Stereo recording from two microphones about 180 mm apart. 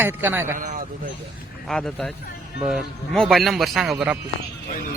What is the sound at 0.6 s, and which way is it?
Speech, 50° right (ahead or behind).